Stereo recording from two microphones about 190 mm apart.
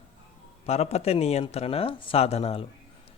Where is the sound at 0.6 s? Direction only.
35° left (ahead or behind).